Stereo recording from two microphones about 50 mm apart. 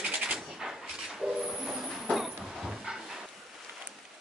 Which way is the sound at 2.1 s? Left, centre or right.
Centre.